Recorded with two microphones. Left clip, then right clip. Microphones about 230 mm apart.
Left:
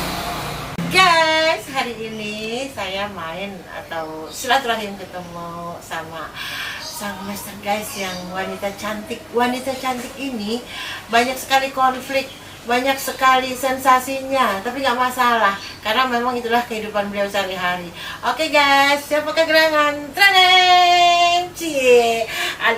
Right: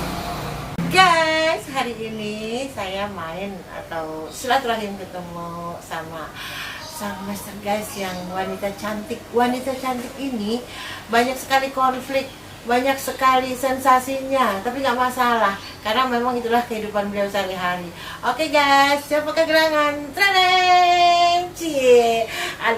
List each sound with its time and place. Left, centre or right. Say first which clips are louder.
0.0 s vehicle: left 3 dB; centre
0.9 s a sound: left 1 dB; centre
2.7 s a woman's voice: left 2 dB; centre
4.4 s a woman's voice: left 2 dB; centre
7.0 s a woman's voice: left 1 dB; centre
11.1 s a woman's voice: left 2 dB; centre